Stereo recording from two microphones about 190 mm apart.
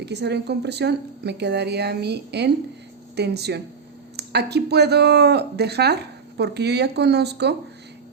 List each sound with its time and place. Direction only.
0.0 s speech: 60° right (ahead or behind)